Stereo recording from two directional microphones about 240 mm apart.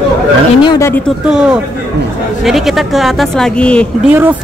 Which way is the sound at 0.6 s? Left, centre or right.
Centre.